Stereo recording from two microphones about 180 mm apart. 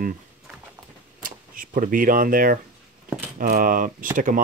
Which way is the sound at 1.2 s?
50° right (ahead or behind).